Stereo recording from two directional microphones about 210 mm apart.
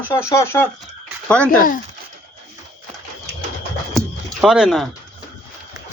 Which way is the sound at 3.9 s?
Centre (ahead or behind).